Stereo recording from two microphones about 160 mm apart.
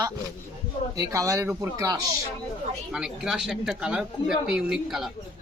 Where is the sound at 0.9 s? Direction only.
20° right (ahead or behind).